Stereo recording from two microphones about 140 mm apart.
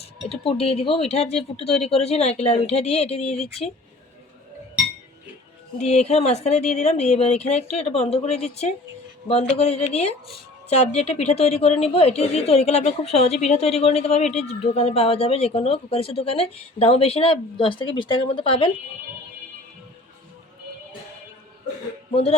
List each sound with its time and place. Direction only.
0.0 s a woman's voice: 45° left (ahead or behind)
5.8 s a woman's voice: 50° left (ahead or behind)
22.1 s a woman's voice: 50° left (ahead or behind)